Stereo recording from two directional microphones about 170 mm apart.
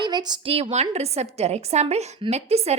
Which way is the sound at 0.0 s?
25° right (ahead or behind).